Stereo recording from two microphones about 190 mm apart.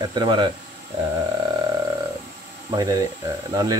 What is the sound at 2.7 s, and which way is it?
Speech, 20° right (ahead or behind).